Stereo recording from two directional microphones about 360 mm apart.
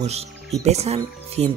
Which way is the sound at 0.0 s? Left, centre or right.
Centre.